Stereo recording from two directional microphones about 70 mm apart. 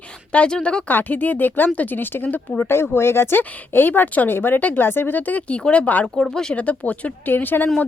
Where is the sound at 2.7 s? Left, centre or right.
Left; by 6.0 s centre.